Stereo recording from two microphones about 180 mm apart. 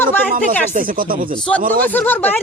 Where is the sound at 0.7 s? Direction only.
50° right (ahead or behind).